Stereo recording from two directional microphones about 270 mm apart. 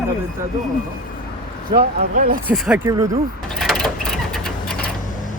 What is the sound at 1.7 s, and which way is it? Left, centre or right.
Speech, right.